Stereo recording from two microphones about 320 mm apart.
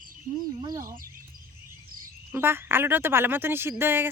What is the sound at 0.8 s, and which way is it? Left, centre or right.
Speech, right.